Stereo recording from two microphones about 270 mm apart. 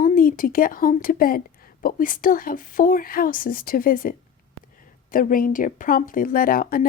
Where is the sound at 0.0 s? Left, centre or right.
Left.